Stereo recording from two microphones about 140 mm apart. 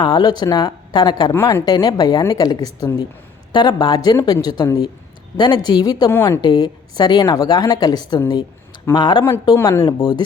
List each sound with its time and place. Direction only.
0.0 s a woman's voice: 30° left (ahead or behind)
6.1 s a woman's voice: 15° left (ahead or behind)
6.4 s a woman's voice: 30° left (ahead or behind)